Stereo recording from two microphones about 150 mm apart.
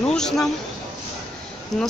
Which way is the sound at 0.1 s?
5° left (ahead or behind).